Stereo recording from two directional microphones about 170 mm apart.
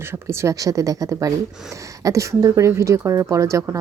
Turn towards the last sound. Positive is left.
turn(degrees=-15)  # may be behind; listen again after turning